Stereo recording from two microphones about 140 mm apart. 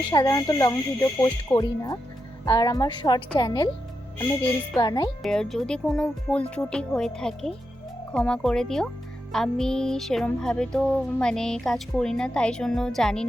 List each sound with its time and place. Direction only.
0.1 s speech: 30° left (ahead or behind)
4.8 s speech: 30° left (ahead or behind)
5.2 s music: 5° left (ahead or behind)